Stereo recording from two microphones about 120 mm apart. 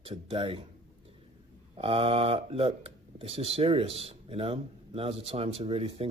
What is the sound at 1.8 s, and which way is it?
Speech, 50° right (ahead or behind).